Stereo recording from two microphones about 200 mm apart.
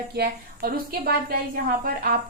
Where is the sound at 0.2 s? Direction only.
50° right (ahead or behind).